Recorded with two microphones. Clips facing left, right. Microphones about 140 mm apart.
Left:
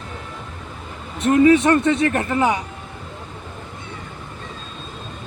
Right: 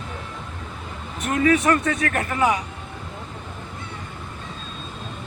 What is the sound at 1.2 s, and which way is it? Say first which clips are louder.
Speech: left 6 dB; 30° left (ahead or behind).